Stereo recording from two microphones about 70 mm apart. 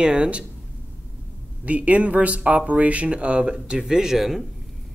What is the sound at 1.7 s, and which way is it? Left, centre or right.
Speech, centre.